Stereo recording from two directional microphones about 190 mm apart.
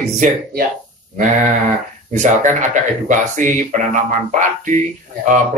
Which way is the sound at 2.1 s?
40° right (ahead or behind).